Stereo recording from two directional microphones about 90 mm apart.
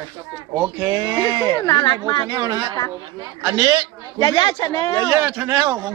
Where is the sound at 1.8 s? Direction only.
55° left (ahead or behind).